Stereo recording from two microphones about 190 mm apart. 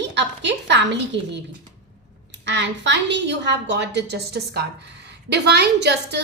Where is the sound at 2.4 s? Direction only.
65° right (ahead or behind).